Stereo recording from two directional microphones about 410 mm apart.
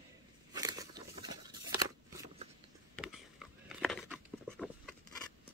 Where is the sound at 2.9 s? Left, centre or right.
Centre.